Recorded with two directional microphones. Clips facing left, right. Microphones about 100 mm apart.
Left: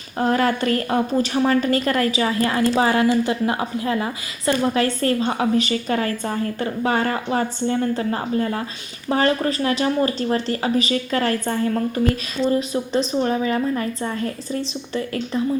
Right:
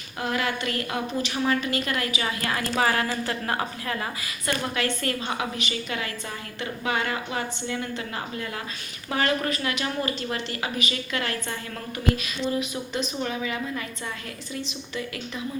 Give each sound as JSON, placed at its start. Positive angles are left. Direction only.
{"t": 0.2, "sound": "a woman's voice", "side_deg": 40}